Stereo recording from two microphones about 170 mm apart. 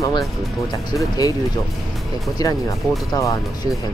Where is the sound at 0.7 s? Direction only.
20° left (ahead or behind).